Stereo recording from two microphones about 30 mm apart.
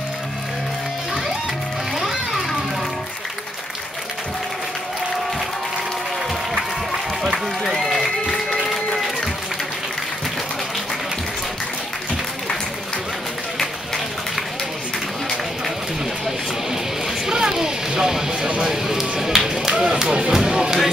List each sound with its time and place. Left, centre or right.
2.0 s music: centre
6.5 s music: right
7.6 s a sound: centre
8.6 s music: centre
17.3 s music: right
19.5 s a sound: centre
19.9 s music: right